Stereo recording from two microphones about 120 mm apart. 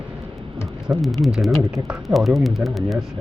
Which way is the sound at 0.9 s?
Centre (ahead or behind).